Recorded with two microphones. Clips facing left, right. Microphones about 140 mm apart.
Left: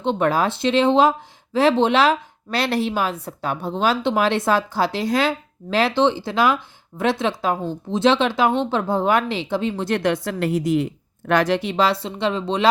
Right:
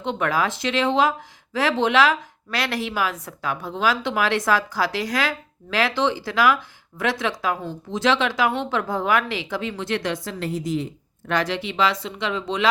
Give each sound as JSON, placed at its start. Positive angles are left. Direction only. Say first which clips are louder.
{"t": 0.0, "sound": "speech", "louder": "left 4 dB", "side_deg": 30}
{"t": 10.0, "sound": "a woman's voice", "louder": "left 6 dB", "side_deg": 60}
{"t": 11.3, "sound": "speech", "louder": "left 5 dB", "side_deg": 50}